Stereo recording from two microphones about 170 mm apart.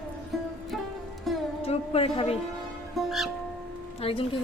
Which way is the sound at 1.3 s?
Centre (ahead or behind).